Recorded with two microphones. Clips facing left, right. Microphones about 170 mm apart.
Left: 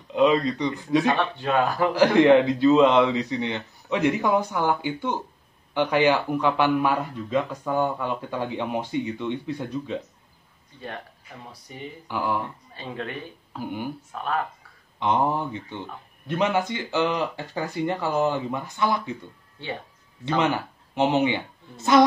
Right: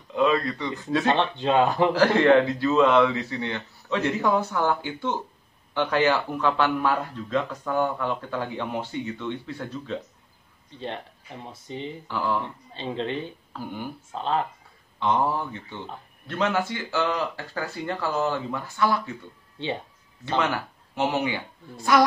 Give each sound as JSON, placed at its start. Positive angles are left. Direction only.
{"t": 0.1, "sound": "speech", "side_deg": 20}
{"t": 1.1, "sound": "speech", "side_deg": -20}
{"t": 2.0, "sound": "speech", "side_deg": 15}
{"t": 11.5, "sound": "speech", "side_deg": -25}
{"t": 12.1, "sound": "speech", "side_deg": 15}
{"t": 12.7, "sound": "speech", "side_deg": -25}
{"t": 13.5, "sound": "speech", "side_deg": 15}
{"t": 14.1, "sound": "speech", "side_deg": -25}
{"t": 15.0, "sound": "speech", "side_deg": 15}
{"t": 20.3, "sound": "a woman's voice", "side_deg": 20}